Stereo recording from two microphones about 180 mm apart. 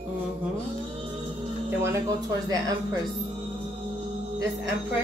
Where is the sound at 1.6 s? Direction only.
15° right (ahead or behind).